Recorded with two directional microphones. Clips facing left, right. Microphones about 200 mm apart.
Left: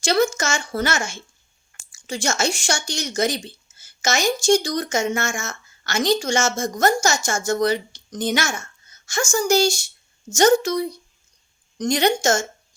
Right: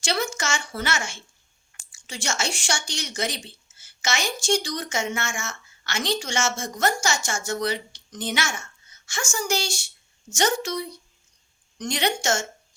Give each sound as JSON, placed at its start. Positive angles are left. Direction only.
{"t": 0.0, "sound": "speech", "side_deg": 40}